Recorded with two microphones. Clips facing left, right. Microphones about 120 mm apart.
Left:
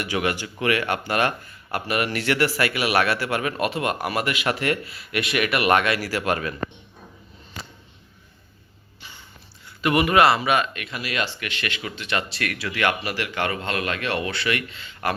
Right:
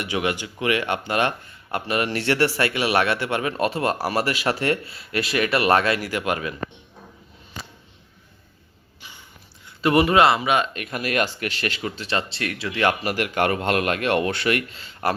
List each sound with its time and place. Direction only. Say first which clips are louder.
0.0 s speech: even; 20° right (ahead or behind)
6.0 s speech: left 1 dB; 20° right (ahead or behind)
9.6 s a man's voice: right 3 dB; 30° right (ahead or behind)
10.8 s speech: right 4 dB; 50° right (ahead or behind); by 12.9 s 25° right (ahead or behind)
13.0 s speech: right 4 dB; 45° right (ahead or behind)